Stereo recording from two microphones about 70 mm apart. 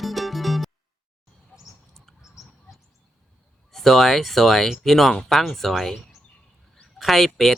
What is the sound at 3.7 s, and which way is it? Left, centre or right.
Speech, centre.